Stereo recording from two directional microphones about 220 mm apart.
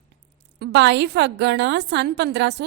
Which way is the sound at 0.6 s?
50° right (ahead or behind).